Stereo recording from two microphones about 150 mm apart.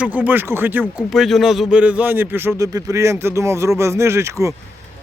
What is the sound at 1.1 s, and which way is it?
A man's voice, centre (ahead or behind).